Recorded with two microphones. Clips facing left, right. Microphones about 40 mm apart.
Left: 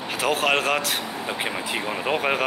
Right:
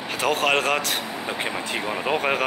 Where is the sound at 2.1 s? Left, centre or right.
Centre.